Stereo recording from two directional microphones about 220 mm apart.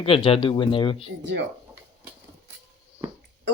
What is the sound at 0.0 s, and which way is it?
Speech, 25° left (ahead or behind).